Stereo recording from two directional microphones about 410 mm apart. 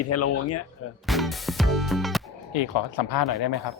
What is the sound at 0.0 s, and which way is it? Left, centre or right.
Speech, left.